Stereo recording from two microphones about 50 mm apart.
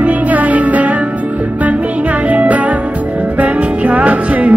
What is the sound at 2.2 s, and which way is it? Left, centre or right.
Music, right.